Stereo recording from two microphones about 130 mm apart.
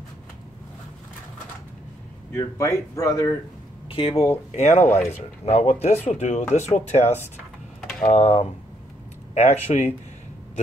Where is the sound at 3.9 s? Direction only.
45° left (ahead or behind).